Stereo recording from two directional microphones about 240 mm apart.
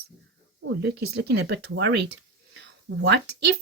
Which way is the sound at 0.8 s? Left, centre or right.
Right.